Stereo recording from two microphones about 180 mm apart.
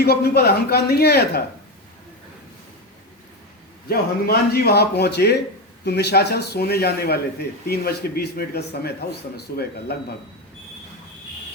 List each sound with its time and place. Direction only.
0.0 s a man's voice: 60° left (ahead or behind)
3.8 s a man's voice: 60° left (ahead or behind)